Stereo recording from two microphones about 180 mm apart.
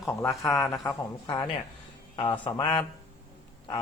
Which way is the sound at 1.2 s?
25° left (ahead or behind).